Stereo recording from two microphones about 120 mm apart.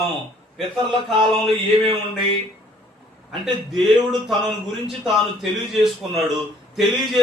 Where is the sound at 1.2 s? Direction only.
45° right (ahead or behind).